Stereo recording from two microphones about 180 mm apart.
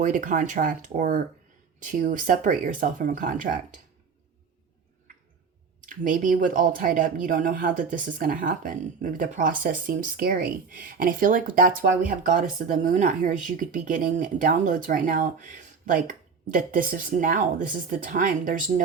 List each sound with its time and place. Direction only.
0.0 s speech: 45° right (ahead or behind)
6.0 s speech: 50° right (ahead or behind)